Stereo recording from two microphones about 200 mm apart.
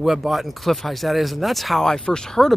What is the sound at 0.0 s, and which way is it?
Speech, centre (ahead or behind).